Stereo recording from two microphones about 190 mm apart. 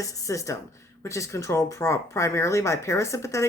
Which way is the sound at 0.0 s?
15° left (ahead or behind).